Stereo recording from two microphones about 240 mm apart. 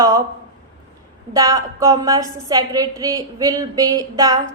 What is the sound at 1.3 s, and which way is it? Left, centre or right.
A woman's voice, centre.